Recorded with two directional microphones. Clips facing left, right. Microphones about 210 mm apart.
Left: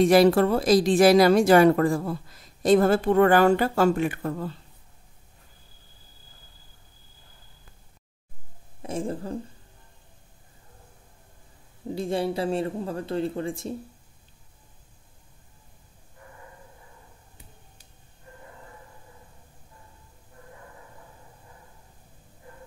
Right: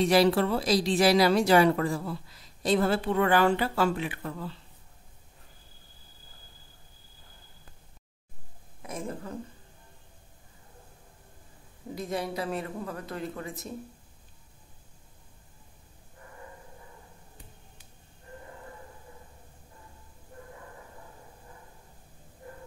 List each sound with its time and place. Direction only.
0.0 s a woman's voice: 50° left (ahead or behind)
8.8 s speech: 30° left (ahead or behind)
11.9 s speech: 30° left (ahead or behind)